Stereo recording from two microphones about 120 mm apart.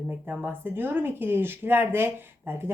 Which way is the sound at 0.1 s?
15° right (ahead or behind).